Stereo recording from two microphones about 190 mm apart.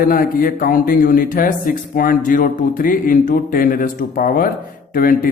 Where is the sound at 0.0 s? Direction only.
50° left (ahead or behind).